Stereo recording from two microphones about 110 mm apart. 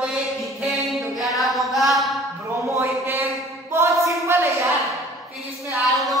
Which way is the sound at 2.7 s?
25° right (ahead or behind).